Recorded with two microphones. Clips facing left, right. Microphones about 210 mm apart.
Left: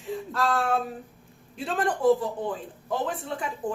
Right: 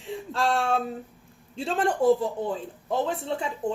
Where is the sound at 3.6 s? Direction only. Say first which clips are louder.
Right 2 dB; 25° right (ahead or behind).